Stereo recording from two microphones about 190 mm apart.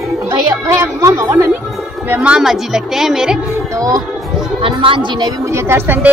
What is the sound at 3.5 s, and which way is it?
Music, 15° right (ahead or behind).